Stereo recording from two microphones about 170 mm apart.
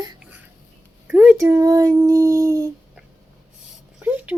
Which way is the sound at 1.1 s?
10° right (ahead or behind).